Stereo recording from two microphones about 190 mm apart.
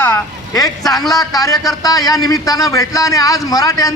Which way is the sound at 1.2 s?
20° left (ahead or behind).